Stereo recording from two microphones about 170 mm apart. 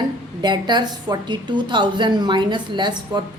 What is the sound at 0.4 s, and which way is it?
A woman's voice, 25° right (ahead or behind).